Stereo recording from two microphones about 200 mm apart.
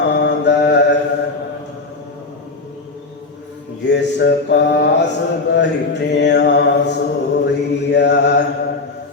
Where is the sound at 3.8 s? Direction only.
60° left (ahead or behind).